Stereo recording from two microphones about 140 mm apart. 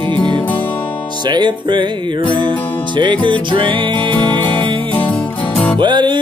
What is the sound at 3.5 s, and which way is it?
Music, 35° right (ahead or behind).